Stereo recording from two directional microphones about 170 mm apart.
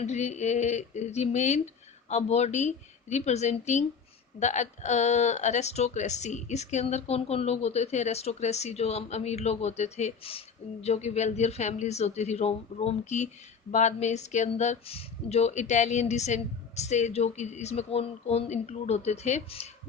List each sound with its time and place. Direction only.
0.0 s a woman's voice: 40° left (ahead or behind)